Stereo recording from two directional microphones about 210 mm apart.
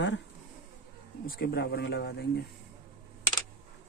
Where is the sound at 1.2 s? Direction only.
45° left (ahead or behind).